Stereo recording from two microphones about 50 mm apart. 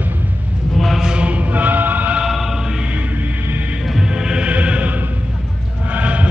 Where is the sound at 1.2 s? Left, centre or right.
Right.